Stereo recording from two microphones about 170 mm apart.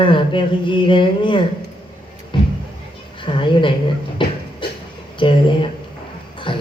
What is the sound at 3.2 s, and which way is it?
Speech, 30° left (ahead or behind).